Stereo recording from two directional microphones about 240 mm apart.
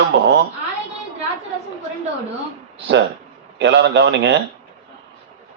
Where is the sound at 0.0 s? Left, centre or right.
Right.